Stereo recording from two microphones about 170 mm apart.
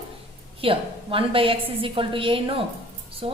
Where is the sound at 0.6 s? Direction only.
30° right (ahead or behind).